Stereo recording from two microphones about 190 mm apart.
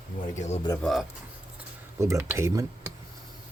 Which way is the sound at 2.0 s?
15° right (ahead or behind).